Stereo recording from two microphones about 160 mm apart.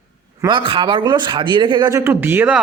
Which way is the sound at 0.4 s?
30° right (ahead or behind).